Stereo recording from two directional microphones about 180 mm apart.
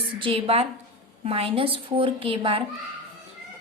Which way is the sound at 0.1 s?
30° right (ahead or behind).